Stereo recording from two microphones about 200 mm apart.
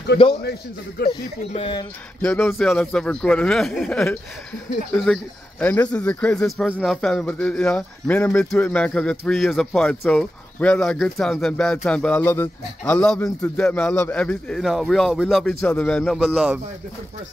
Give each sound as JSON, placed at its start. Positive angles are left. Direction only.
{"t": 0.4, "sound": "a man's voice", "side_deg": 55}
{"t": 1.5, "sound": "speech", "side_deg": 25}
{"t": 2.2, "sound": "speech", "side_deg": 5}